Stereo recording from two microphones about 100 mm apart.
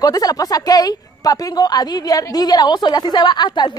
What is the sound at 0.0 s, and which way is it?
Speech, 40° left (ahead or behind).